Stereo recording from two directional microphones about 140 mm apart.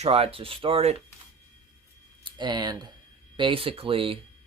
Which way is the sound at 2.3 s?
30° right (ahead or behind).